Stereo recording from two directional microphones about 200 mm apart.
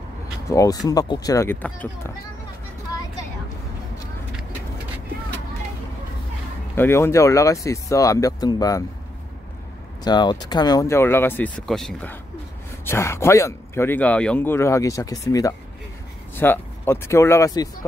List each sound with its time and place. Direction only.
0.5 s speech: 15° left (ahead or behind)
6.7 s speech: 10° left (ahead or behind)
10.0 s speech: 20° left (ahead or behind)